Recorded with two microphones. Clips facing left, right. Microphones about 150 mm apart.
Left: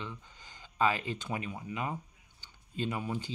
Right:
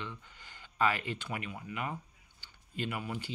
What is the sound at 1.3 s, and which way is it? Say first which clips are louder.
Speech: left 3 dB; 20° left (ahead or behind).